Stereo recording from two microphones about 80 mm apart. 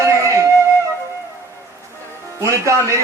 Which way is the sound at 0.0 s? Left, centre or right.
Right.